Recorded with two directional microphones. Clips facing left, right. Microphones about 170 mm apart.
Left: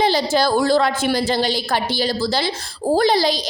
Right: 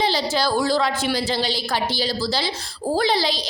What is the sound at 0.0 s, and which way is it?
A woman's voice, 50° left (ahead or behind).